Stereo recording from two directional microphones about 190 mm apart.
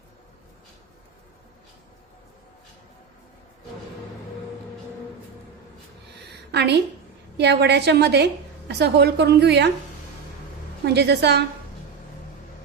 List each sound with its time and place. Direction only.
6.5 s a woman's voice: 60° right (ahead or behind)
10.8 s a woman's voice: 60° right (ahead or behind)